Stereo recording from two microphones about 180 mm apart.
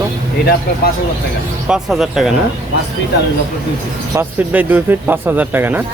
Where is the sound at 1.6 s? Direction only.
5° right (ahead or behind).